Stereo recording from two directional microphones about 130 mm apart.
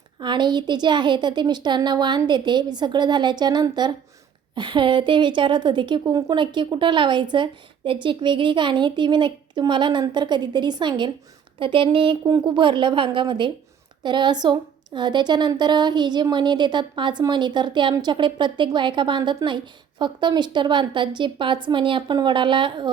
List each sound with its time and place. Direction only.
0.2 s a woman's voice: 35° right (ahead or behind)